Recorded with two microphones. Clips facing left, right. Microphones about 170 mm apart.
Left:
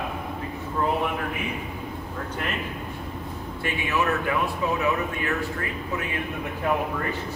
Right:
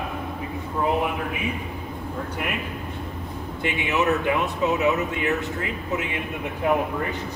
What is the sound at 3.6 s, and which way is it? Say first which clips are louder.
Speech: right 2 dB; 20° right (ahead or behind).